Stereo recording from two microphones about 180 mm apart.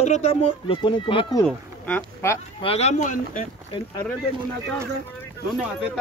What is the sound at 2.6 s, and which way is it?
Speech, 35° left (ahead or behind).